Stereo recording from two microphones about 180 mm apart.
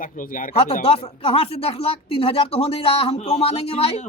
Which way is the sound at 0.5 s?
30° left (ahead or behind).